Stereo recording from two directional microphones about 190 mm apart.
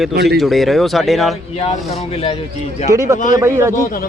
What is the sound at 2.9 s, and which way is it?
Speech, 15° right (ahead or behind).